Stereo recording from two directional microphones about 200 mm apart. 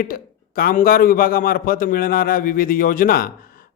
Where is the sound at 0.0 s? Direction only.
45° left (ahead or behind).